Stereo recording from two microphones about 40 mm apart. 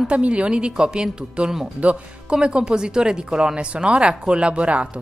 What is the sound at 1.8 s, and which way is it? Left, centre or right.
Speech, right.